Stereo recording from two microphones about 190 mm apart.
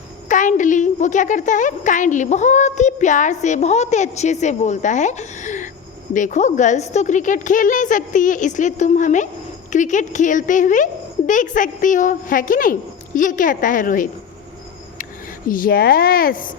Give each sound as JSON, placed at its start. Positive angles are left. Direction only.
{"t": 0.3, "sound": "a woman's voice", "side_deg": 40}
{"t": 15.4, "sound": "a woman's voice", "side_deg": 45}